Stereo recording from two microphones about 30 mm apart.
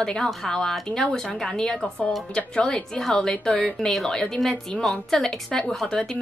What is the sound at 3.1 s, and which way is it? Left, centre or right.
Speech, left.